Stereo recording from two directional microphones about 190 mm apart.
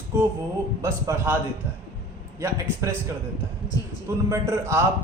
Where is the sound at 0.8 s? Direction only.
15° right (ahead or behind).